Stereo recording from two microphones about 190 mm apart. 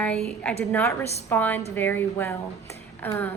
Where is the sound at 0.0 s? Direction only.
5° left (ahead or behind).